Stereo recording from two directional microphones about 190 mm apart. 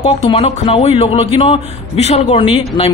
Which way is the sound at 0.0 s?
30° left (ahead or behind).